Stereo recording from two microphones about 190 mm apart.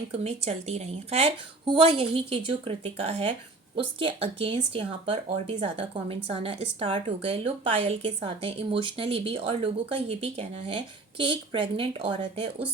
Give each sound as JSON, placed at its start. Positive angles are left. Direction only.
{"t": 0.1, "sound": "a woman's voice", "side_deg": -35}